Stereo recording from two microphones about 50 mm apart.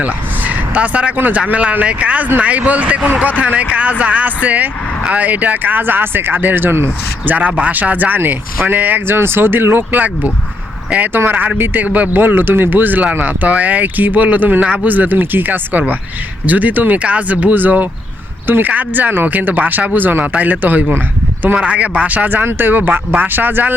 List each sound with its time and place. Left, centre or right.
0.0 s speech: right
7.3 s speech: right
11.1 s speech: right